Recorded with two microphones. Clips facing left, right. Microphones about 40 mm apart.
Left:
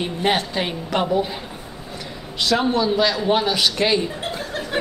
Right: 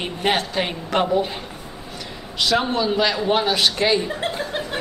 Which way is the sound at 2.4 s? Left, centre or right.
Centre.